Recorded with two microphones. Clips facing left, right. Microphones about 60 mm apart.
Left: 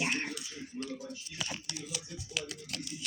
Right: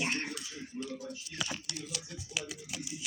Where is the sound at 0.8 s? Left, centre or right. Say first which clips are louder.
Even; right.